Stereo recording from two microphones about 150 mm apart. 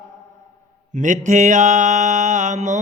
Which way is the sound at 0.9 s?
55° right (ahead or behind).